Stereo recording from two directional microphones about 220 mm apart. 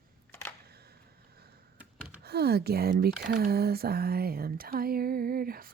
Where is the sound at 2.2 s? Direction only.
45° right (ahead or behind).